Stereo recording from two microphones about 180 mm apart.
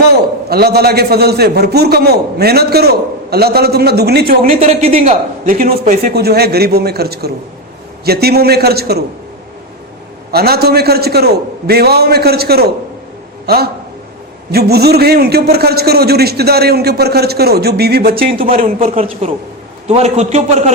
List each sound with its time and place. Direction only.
0.0 s a man's voice: 60° right (ahead or behind)
4.6 s speech: 35° right (ahead or behind)
5.5 s a man's voice: 50° right (ahead or behind)
10.3 s a man's voice: 60° right (ahead or behind); by 20.7 s 40° right (ahead or behind)